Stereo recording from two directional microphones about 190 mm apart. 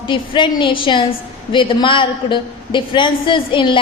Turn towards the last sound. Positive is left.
turn(degrees=25)  # may be behind; listen again after turning